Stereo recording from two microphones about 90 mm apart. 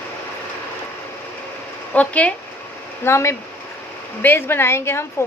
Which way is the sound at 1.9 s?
15° left (ahead or behind).